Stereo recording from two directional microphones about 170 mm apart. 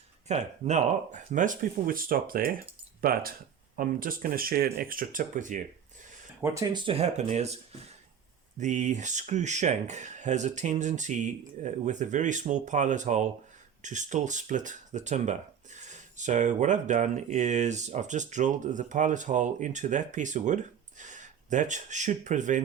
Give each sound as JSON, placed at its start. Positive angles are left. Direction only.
{"t": 0.3, "sound": "speech", "side_deg": -40}
{"t": 6.4, "sound": "speech", "side_deg": -20}
{"t": 6.8, "sound": "speech", "side_deg": -35}